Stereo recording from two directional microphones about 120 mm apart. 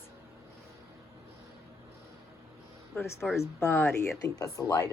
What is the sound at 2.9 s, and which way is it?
Speech, centre (ahead or behind).